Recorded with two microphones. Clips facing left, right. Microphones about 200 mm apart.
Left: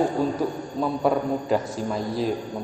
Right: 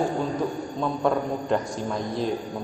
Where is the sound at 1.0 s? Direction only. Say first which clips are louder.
Left 1 dB; 5° left (ahead or behind).